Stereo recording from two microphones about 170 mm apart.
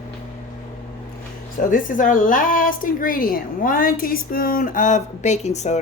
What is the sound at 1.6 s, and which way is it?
A woman's voice, 50° left (ahead or behind).